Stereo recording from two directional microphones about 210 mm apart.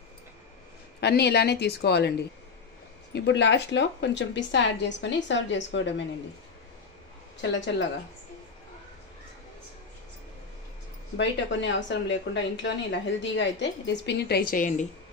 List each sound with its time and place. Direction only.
1.0 s a woman's voice: 50° left (ahead or behind)
11.1 s a woman's voice: 60° left (ahead or behind); by 14.9 s 40° left (ahead or behind)